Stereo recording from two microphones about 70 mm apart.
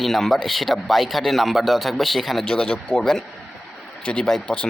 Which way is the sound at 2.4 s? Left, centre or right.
Centre.